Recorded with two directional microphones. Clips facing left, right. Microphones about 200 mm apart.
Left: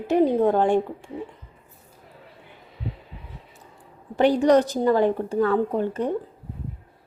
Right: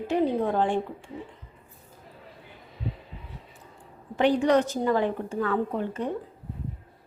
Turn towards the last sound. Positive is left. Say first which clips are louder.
# left 5 dB
turn(degrees=40)  # may be behind; listen again after turning